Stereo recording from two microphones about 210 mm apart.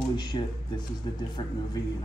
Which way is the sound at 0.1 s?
20° left (ahead or behind).